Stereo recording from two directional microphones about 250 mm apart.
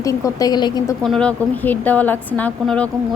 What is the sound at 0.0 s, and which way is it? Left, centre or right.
Speech, centre.